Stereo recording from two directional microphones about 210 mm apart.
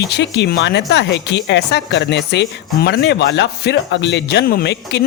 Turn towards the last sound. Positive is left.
turn(degrees=50)  # may be behind; listen again after turning